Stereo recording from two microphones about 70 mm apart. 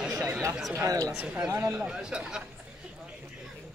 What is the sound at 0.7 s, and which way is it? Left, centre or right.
Speech, right.